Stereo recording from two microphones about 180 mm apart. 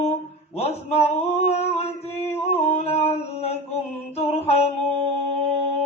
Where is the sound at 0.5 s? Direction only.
35° left (ahead or behind).